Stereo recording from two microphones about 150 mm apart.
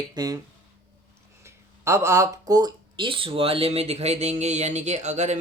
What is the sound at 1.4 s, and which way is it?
Speech, 20° right (ahead or behind).